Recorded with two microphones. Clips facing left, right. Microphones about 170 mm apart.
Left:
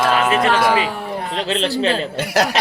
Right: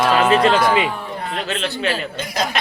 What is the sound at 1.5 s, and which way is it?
Speech, 35° left (ahead or behind).